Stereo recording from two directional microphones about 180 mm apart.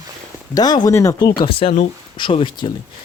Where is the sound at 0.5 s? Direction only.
20° left (ahead or behind).